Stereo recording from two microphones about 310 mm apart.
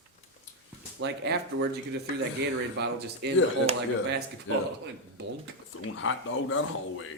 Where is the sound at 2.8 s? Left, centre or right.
Right.